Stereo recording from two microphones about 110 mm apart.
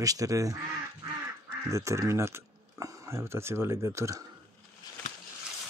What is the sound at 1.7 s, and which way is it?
Speech, 30° right (ahead or behind).